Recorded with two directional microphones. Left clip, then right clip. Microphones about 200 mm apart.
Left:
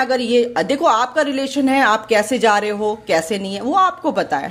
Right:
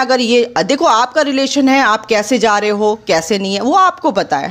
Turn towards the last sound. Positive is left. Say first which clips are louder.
# right 4 dB
turn(degrees=-20)  # may be behind; listen again after turning